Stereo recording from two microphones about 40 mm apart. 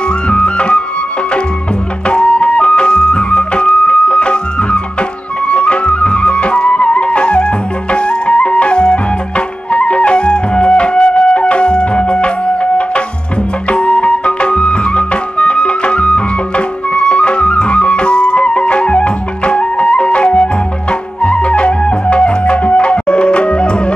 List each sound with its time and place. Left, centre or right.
0.3 s music: left
2.0 s music: left